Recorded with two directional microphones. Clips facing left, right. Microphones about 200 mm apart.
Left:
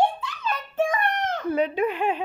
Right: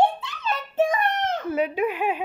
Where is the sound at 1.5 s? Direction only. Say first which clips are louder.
Left 2 dB; 5° right (ahead or behind).